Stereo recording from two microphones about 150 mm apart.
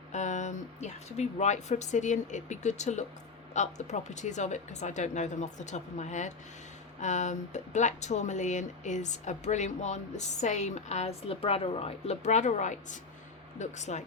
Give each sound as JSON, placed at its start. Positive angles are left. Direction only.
{"t": 0.1, "sound": "speech", "side_deg": 55}